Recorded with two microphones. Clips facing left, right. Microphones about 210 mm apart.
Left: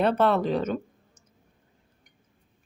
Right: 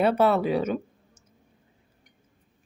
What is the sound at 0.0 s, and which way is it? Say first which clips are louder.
Speech: right 1 dB; 5° right (ahead or behind).